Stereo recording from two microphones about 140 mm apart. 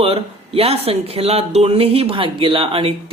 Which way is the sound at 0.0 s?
45° right (ahead or behind).